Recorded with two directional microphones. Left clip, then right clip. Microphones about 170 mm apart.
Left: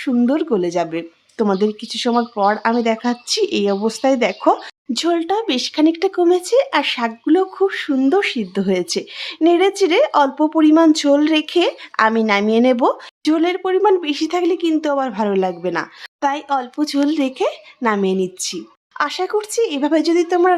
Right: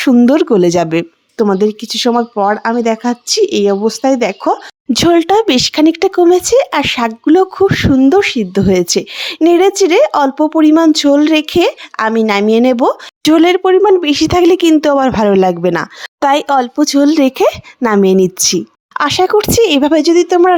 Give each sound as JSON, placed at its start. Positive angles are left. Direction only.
{"t": 0.0, "sound": "a woman's voice", "side_deg": -55}
{"t": 1.4, "sound": "speech", "side_deg": -30}
{"t": 4.9, "sound": "a woman's voice", "side_deg": -50}
{"t": 13.2, "sound": "a woman's voice", "side_deg": -55}
{"t": 19.9, "sound": "a woman's voice", "side_deg": -40}